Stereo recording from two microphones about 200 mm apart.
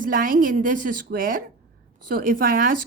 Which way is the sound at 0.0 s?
45° right (ahead or behind).